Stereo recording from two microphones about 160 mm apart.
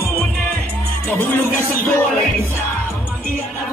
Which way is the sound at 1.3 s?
10° left (ahead or behind).